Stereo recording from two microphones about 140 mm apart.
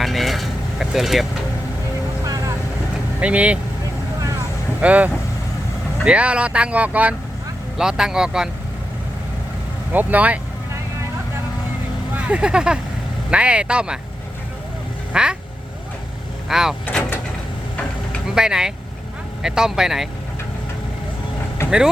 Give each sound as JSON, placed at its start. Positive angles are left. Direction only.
{"t": 0.0, "sound": "vehicle", "side_deg": 0}
{"t": 3.2, "sound": "speech", "side_deg": -10}
{"t": 4.8, "sound": "speech", "side_deg": -10}
{"t": 9.9, "sound": "speech", "side_deg": -10}
{"t": 12.1, "sound": "speech", "side_deg": -10}
{"t": 15.1, "sound": "vehicle", "side_deg": -5}
{"t": 16.5, "sound": "speech", "side_deg": -5}
{"t": 16.8, "sound": "vehicle", "side_deg": 15}
{"t": 18.3, "sound": "speech", "side_deg": -5}
{"t": 21.6, "sound": "vehicle", "side_deg": 20}